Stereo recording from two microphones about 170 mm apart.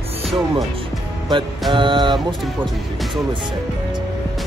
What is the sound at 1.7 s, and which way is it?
Music, 30° right (ahead or behind).